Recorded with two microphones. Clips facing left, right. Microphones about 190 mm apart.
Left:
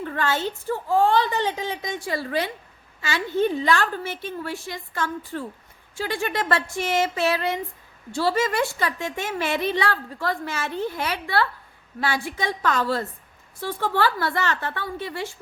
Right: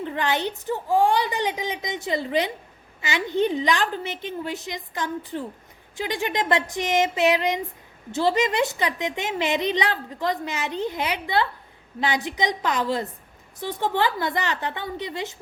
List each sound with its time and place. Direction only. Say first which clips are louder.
0.0 s a woman's voice: even; 20° right (ahead or behind)